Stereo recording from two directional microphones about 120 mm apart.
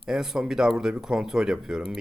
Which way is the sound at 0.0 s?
5° right (ahead or behind).